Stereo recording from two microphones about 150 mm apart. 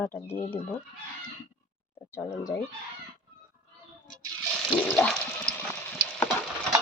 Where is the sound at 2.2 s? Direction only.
25° left (ahead or behind).